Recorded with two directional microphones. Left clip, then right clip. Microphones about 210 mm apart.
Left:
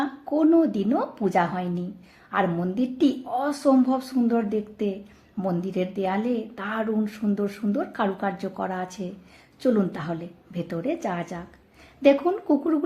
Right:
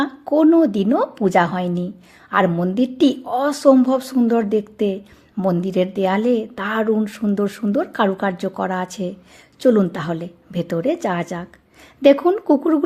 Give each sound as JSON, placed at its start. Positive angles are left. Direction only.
{"t": 0.0, "sound": "a woman's voice", "side_deg": -40}